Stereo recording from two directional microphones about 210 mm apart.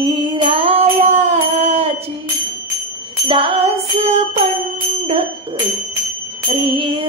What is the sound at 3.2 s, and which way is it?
Music, 25° right (ahead or behind).